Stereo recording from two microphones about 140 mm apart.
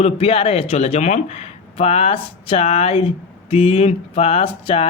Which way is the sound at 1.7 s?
45° left (ahead or behind).